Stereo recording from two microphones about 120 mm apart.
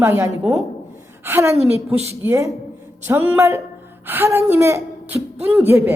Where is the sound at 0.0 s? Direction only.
20° right (ahead or behind).